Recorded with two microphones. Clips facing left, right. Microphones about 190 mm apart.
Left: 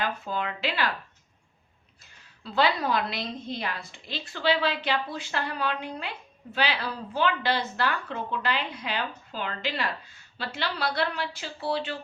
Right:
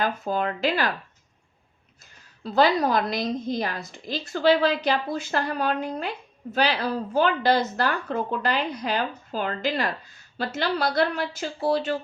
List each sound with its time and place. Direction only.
0.0 s a woman's voice: 45° right (ahead or behind)
2.4 s a woman's voice: 40° right (ahead or behind)